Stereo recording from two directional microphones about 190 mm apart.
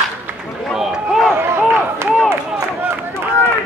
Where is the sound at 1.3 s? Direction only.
15° right (ahead or behind).